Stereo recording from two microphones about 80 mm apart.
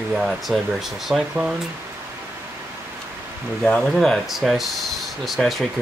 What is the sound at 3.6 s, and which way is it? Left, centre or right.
Speech, centre.